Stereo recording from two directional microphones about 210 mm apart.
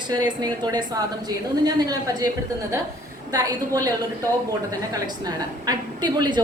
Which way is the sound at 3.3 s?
15° right (ahead or behind).